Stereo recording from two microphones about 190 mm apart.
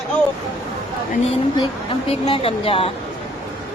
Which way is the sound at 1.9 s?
30° left (ahead or behind).